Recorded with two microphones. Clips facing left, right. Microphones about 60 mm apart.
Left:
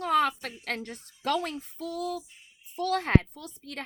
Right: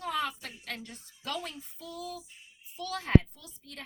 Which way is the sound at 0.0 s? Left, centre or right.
Left.